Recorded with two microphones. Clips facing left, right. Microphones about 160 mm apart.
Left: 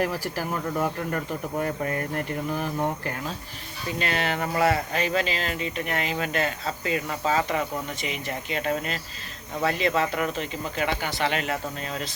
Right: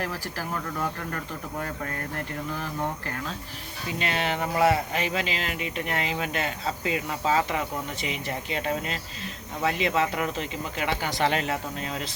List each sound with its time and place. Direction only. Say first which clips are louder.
0.0 s speech: left 5 dB; 15° left (ahead or behind)
3.9 s speech: left 1 dB; 20° right (ahead or behind)
5.8 s speech: even; 25° right (ahead or behind)
11.1 s speech: right 1 dB; 35° right (ahead or behind)